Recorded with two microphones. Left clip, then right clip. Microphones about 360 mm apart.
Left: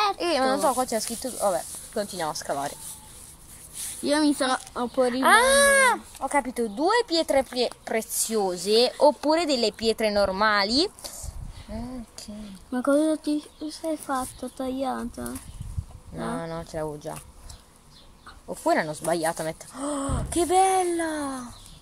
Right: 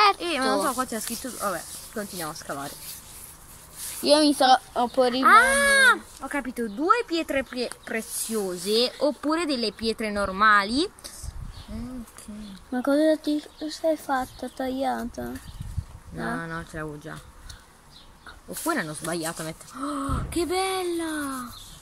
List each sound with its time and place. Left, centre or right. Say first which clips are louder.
0.2 s speech: left 2 dB; centre
4.0 s speech: right 4 dB; centre
5.2 s speech: right 1 dB; left
8.5 s speech: left 2 dB; left
12.7 s speech: right 1 dB; centre
16.3 s speech: left 2 dB; centre
18.7 s speech: left 5 dB; left